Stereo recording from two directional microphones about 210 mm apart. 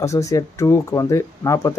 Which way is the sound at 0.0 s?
15° left (ahead or behind).